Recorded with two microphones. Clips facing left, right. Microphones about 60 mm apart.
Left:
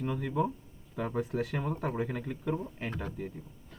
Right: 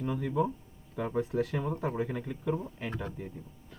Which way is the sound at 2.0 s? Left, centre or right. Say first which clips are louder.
Right 1 dB; left.